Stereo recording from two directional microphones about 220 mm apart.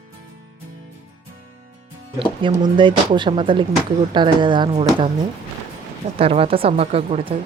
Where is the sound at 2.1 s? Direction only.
20° right (ahead or behind).